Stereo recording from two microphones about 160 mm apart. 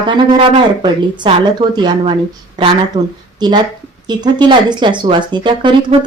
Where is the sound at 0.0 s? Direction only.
30° right (ahead or behind).